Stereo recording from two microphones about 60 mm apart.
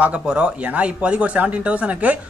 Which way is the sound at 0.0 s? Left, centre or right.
Centre.